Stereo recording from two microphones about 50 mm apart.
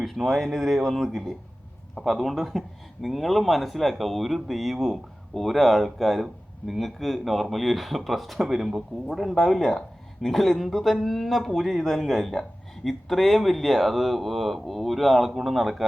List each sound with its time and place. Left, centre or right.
0.0 s speech: centre